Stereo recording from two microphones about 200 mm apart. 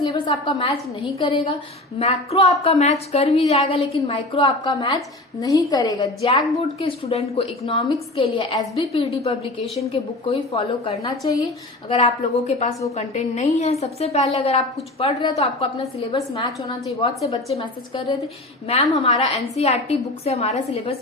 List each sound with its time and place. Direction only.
0.0 s a woman's voice: 25° left (ahead or behind)
6.7 s a woman's voice: 30° left (ahead or behind)
16.1 s a woman's voice: 20° left (ahead or behind)